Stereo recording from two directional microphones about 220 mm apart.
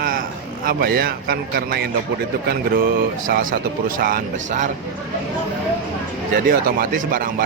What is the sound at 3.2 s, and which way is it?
Speech, 40° right (ahead or behind).